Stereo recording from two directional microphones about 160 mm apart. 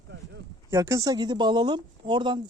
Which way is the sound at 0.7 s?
20° right (ahead or behind).